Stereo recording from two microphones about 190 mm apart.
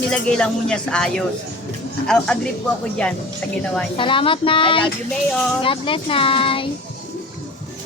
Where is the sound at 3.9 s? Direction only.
25° left (ahead or behind).